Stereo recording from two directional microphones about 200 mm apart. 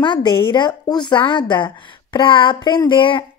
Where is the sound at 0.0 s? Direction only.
25° left (ahead or behind).